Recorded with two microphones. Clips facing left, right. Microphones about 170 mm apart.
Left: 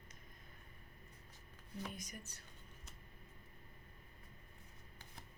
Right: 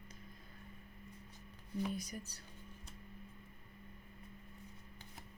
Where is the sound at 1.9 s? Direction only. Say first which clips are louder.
Right 7 dB; 35° right (ahead or behind).